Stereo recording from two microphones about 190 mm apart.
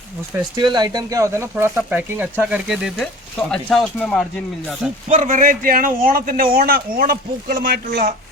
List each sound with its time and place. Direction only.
0.5 s speech: 20° right (ahead or behind); by 4.2 s 5° left (ahead or behind)
5.0 s a man's voice: 40° right (ahead or behind)